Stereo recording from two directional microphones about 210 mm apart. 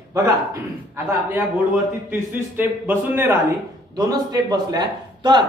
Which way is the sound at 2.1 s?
10° right (ahead or behind).